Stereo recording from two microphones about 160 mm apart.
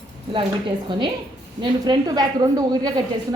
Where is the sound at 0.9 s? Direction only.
30° right (ahead or behind).